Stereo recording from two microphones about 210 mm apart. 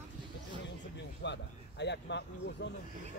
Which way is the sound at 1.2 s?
55° left (ahead or behind).